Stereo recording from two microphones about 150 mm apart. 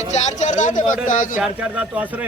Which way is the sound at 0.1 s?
50° left (ahead or behind).